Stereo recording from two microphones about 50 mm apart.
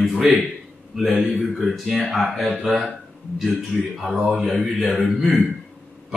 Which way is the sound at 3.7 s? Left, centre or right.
Right.